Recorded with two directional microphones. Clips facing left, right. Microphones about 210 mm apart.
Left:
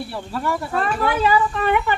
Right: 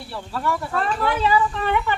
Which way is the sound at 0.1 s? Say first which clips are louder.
Right 2 dB; 10° left (ahead or behind).